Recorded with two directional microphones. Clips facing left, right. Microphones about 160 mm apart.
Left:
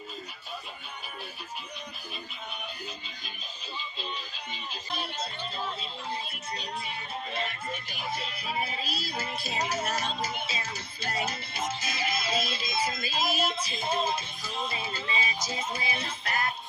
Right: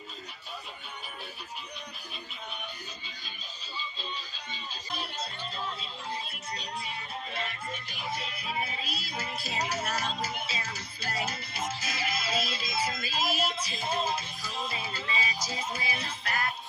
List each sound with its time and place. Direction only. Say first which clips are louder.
8.1 s music: left 1 dB; 30° left (ahead or behind)